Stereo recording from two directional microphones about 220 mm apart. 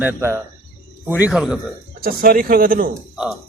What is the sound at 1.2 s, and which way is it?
Speech, centre (ahead or behind).